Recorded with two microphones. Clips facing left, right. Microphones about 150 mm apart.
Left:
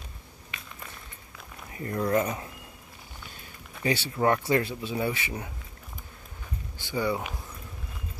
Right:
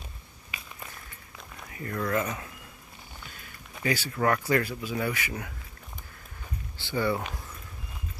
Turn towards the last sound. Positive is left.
turn(degrees=10)  # may be behind; listen again after turning